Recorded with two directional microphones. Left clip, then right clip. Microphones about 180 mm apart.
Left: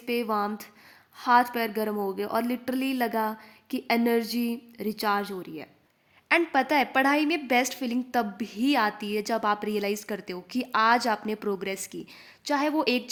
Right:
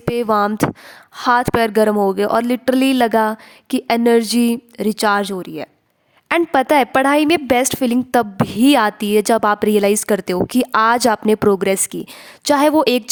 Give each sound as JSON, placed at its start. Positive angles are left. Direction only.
{"t": 0.1, "sound": "a woman's voice", "side_deg": -45}